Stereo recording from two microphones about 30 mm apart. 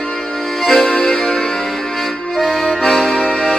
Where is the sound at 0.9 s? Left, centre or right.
Centre.